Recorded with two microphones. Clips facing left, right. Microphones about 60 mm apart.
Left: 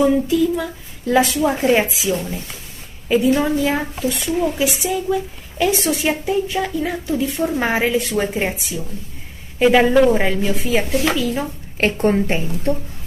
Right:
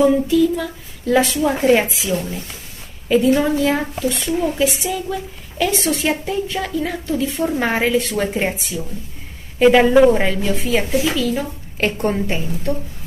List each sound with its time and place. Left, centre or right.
0.0 s a woman's voice: centre
11.1 s speech: centre
12.3 s speech: left